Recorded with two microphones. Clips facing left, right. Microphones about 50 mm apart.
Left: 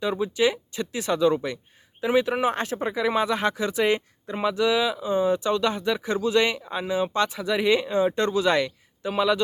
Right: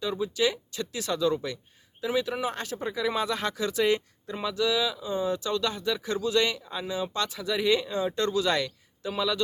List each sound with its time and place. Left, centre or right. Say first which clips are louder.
0.0 s speech: left 4 dB; left